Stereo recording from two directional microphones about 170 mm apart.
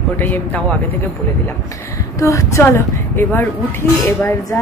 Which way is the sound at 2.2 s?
20° left (ahead or behind).